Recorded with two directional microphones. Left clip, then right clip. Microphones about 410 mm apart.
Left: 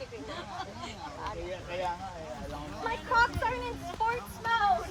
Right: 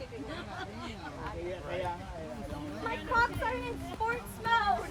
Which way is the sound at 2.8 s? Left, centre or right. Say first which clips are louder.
Left 3 dB; left.